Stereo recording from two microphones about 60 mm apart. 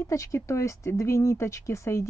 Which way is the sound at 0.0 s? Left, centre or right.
Left.